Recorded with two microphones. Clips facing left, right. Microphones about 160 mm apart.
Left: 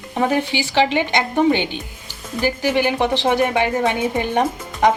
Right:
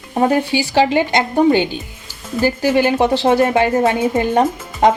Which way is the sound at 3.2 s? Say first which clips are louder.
Right 4 dB; 40° right (ahead or behind).